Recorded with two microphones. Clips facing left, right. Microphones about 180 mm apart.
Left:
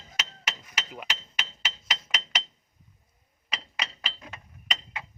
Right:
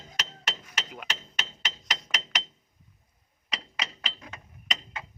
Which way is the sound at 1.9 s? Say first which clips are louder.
Even; 5° left (ahead or behind).